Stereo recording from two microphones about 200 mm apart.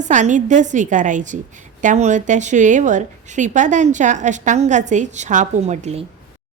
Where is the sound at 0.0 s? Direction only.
40° right (ahead or behind).